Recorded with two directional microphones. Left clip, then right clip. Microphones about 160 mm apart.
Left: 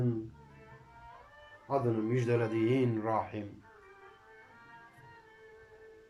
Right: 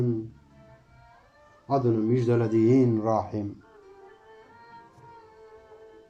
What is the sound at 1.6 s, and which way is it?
A man's voice, 25° right (ahead or behind).